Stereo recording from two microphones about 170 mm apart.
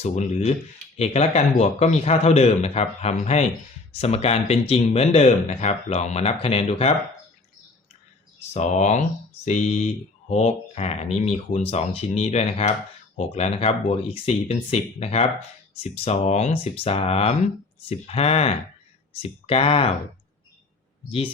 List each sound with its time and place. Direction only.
0.0 s speech: 40° left (ahead or behind)
8.5 s speech: 40° left (ahead or behind)